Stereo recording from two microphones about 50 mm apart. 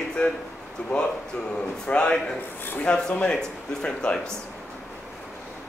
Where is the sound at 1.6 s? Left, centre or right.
Left.